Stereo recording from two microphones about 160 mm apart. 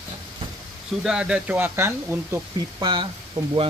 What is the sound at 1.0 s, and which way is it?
Speech, 5° right (ahead or behind).